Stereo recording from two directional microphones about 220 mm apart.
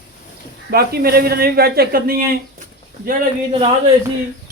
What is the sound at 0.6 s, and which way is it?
Speech, 45° right (ahead or behind).